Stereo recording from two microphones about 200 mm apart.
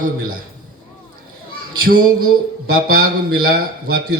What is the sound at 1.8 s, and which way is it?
A man's voice, 50° right (ahead or behind).